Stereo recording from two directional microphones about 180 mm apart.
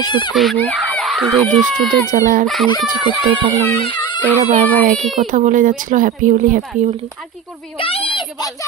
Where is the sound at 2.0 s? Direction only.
45° right (ahead or behind).